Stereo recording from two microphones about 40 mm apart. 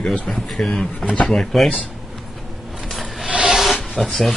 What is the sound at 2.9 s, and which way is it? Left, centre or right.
Rub, centre.